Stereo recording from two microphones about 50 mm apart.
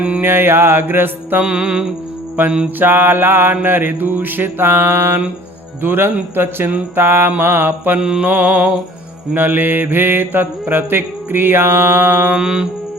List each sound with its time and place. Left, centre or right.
0.2 s mantra: right
1.4 s music: right
2.4 s mantra: right
7.9 s mantra: centre
8.2 s music: right
9.3 s mantra: right
12.3 s music: centre